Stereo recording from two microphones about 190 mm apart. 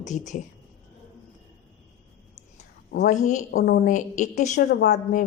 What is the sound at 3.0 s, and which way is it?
A woman's voice, 40° left (ahead or behind).